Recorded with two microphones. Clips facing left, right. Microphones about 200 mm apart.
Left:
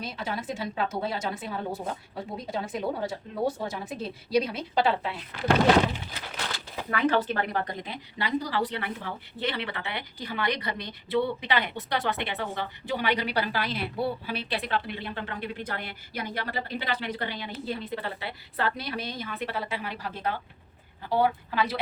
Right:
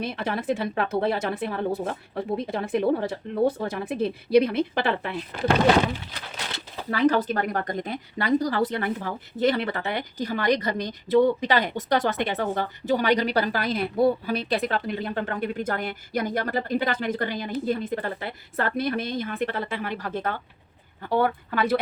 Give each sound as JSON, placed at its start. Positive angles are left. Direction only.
{"t": 0.0, "sound": "speech", "side_deg": -60}
{"t": 6.5, "sound": "speech", "side_deg": -35}